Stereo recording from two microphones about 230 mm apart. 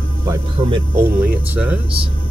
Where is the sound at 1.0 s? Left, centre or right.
Centre.